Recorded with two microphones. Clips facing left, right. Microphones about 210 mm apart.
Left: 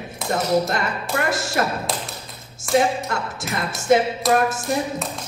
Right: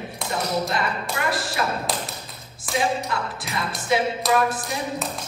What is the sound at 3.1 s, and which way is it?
Speech, 45° left (ahead or behind).